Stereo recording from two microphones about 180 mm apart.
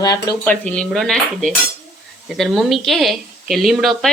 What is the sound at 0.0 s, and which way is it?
Speech, 20° left (ahead or behind).